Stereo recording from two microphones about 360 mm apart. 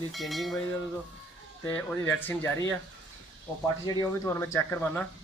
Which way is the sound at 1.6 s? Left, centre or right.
Centre.